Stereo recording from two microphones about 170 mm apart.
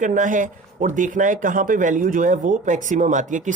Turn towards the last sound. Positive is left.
turn(degrees=-45)  # may be behind; listen again after turning